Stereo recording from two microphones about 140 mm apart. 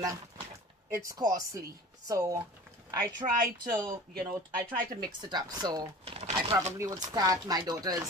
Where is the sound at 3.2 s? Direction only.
40° right (ahead or behind).